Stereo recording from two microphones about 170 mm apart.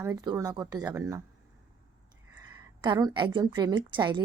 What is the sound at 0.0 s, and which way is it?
A woman's voice, 20° right (ahead or behind).